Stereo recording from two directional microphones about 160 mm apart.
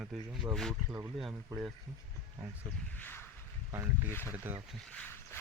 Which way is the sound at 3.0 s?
10° left (ahead or behind).